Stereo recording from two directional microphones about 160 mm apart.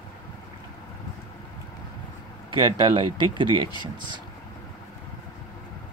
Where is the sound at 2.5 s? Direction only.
30° right (ahead or behind).